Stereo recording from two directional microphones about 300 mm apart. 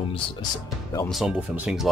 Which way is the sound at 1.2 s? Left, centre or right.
Centre.